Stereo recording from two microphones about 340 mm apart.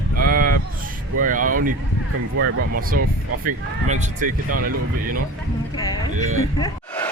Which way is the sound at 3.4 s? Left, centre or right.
Right.